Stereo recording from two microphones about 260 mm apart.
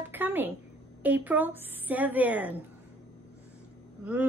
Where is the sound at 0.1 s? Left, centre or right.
Centre.